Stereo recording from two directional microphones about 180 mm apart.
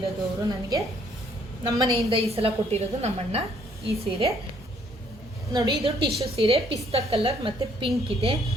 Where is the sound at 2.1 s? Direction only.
35° right (ahead or behind).